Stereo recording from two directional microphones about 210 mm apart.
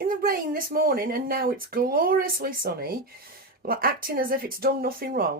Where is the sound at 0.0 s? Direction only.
45° right (ahead or behind).